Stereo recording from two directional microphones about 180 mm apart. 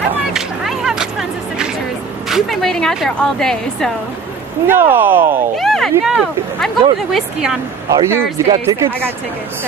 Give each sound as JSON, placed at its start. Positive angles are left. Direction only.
{"t": 0.3, "sound": "a sound", "side_deg": -5}
{"t": 2.2, "sound": "speech", "side_deg": 0}
{"t": 4.6, "sound": "speech", "side_deg": -10}
{"t": 5.6, "sound": "speech", "side_deg": 0}
{"t": 7.9, "sound": "speech", "side_deg": -20}